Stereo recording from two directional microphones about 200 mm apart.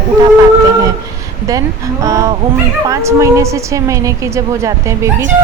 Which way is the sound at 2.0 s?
15° right (ahead or behind).